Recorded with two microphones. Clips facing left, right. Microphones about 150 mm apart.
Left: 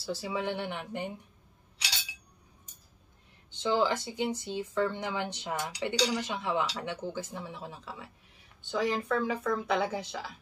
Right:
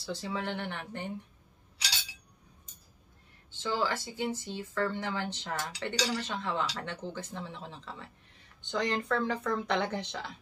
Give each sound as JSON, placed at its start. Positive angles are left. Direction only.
{"t": 0.0, "sound": "speech", "side_deg": 10}
{"t": 3.5, "sound": "speech", "side_deg": 15}